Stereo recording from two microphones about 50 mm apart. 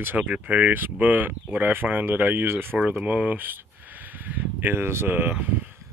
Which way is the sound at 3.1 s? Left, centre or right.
Right.